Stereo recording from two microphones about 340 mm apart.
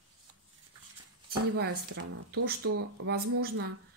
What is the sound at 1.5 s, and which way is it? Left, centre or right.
A woman's voice, right.